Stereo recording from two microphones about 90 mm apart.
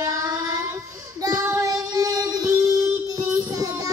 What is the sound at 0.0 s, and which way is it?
Child singing, 45° right (ahead or behind).